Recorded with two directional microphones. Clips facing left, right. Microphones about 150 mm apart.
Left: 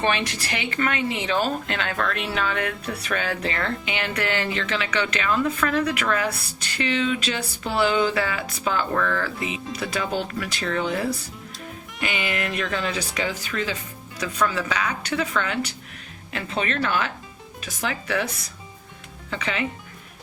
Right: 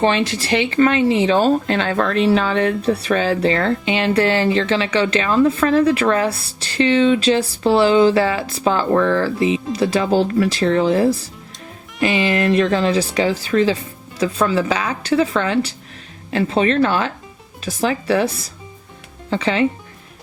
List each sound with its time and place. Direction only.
0.0 s speech: 25° right (ahead or behind)